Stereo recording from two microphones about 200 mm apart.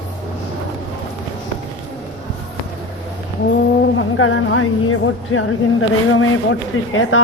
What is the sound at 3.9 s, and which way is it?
A woman's voice, 75° left (ahead or behind).